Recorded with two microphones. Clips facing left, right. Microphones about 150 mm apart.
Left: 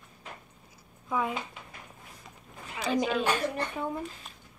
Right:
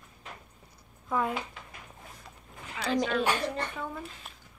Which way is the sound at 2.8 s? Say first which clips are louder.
Even; 5° left (ahead or behind).